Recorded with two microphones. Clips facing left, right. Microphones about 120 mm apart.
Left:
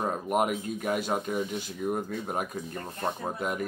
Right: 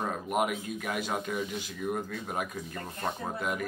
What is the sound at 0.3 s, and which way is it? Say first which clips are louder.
Speech: left 2 dB; 35° left (ahead or behind).